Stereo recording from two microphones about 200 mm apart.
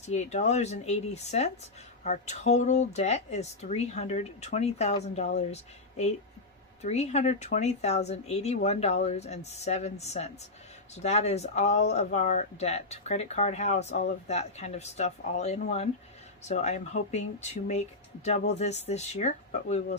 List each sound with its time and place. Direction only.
0.0 s speech: 35° left (ahead or behind)